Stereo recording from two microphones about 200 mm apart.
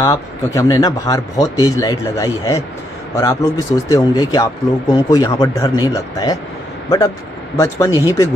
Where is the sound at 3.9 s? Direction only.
15° left (ahead or behind).